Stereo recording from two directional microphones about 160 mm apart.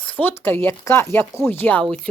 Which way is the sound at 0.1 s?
10° left (ahead or behind).